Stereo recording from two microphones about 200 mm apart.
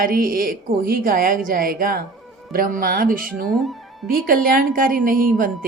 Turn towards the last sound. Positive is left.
turn(degrees=-45)  # may be behind; listen again after turning